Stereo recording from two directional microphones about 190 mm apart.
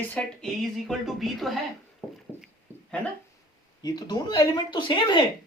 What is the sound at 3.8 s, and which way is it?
Speech, 20° left (ahead or behind).